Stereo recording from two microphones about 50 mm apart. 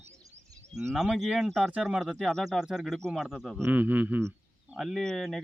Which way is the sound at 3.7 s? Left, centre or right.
Right.